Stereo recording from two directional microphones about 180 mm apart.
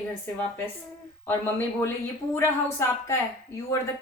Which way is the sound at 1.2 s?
10° left (ahead or behind).